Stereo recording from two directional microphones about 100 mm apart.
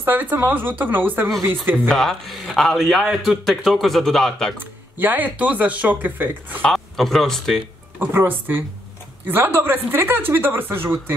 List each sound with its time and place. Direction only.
0.0 s speech: 20° right (ahead or behind)
1.9 s a man's voice: 5° left (ahead or behind)
4.6 s speech: 20° right (ahead or behind)
6.6 s speech: 5° left (ahead or behind)
8.0 s speech: 20° right (ahead or behind)